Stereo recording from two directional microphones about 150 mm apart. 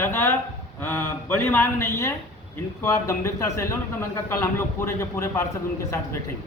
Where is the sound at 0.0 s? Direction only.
15° left (ahead or behind).